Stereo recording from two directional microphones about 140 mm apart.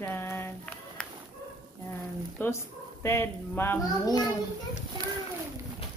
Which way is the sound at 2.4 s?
15° left (ahead or behind).